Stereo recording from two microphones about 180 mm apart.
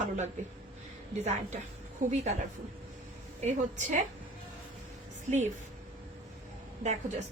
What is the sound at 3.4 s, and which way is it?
Speech, 40° right (ahead or behind).